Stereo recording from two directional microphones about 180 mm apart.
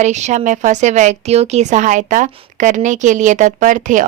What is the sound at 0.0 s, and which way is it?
A woman's voice, 40° right (ahead or behind).